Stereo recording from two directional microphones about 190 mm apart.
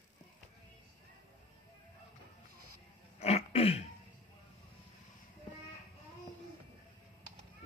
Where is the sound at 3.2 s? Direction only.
30° left (ahead or behind).